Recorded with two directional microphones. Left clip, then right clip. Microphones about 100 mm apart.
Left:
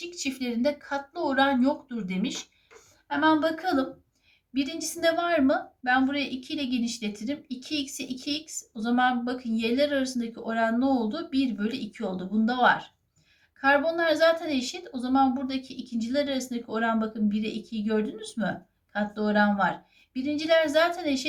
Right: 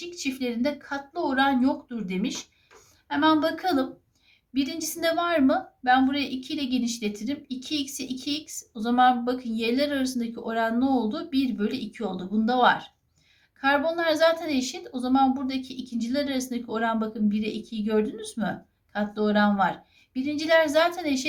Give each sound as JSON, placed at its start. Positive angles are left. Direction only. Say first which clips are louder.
{"t": 0.0, "sound": "a woman's voice", "louder": "right 2 dB", "side_deg": -20}